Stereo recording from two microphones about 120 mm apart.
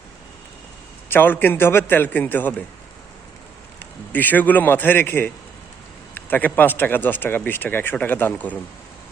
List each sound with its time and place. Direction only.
1.1 s speech: 15° left (ahead or behind)
3.8 s speech: 15° left (ahead or behind)